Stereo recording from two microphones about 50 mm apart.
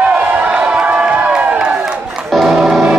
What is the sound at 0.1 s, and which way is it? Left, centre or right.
Crowd, right.